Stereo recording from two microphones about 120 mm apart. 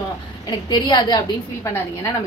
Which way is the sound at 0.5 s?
35° left (ahead or behind).